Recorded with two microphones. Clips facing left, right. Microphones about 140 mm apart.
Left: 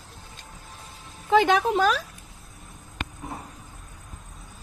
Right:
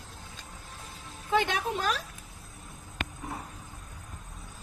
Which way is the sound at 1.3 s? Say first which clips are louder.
Left 8 dB; 90° left.